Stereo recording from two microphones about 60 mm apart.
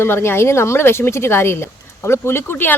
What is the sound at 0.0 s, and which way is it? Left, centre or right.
Speech, left.